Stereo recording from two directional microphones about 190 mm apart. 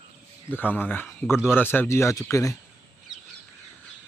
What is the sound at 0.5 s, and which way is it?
Speech, 10° left (ahead or behind).